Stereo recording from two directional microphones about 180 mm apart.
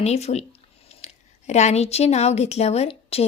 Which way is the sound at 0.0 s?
35° left (ahead or behind).